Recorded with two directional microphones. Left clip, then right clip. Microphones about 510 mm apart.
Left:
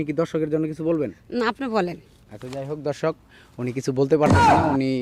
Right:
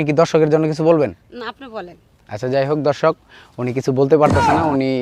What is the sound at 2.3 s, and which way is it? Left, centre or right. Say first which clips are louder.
Speech: right 14 dB; right.